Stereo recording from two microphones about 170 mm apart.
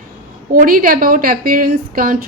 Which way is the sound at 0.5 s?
60° right (ahead or behind).